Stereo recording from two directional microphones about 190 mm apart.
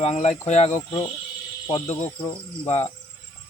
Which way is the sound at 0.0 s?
35° left (ahead or behind).